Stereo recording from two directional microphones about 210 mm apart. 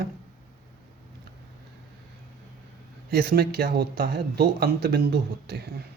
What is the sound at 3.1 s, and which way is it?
Speech, 50° right (ahead or behind).